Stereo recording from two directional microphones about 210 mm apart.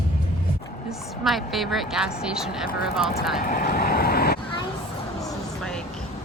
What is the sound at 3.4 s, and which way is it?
Speech, 40° left (ahead or behind).